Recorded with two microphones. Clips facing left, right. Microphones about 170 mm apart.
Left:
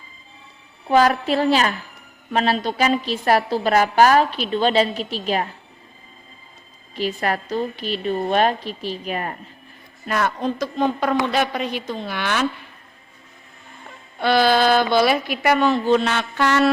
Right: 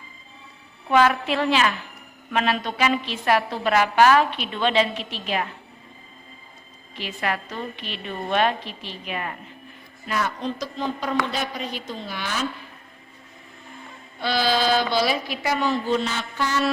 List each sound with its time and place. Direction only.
0.9 s a woman's voice: 35° left (ahead or behind)
6.9 s a woman's voice: 40° left (ahead or behind)
10.1 s a woman's voice: 55° left (ahead or behind); by 12.5 s 70° left (ahead or behind)
14.2 s a woman's voice: 55° left (ahead or behind)